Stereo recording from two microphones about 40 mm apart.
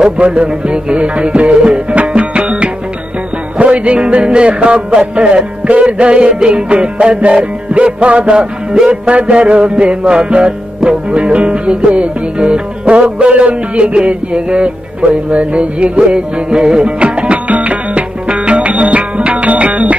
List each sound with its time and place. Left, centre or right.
0.2 s music: right